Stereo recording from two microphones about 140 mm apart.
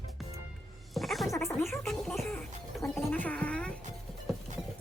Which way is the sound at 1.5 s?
Centre (ahead or behind).